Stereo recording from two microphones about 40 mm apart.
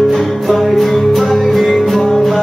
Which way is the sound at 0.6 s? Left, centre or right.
Centre.